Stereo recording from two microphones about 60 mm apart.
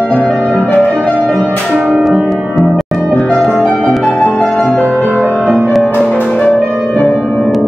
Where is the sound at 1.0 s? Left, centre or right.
Centre.